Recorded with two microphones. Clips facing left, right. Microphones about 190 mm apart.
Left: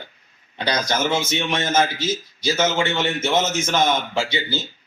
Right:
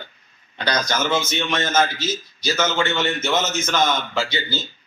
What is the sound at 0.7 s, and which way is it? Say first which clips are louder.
A man's voice: even; 25° left (ahead or behind).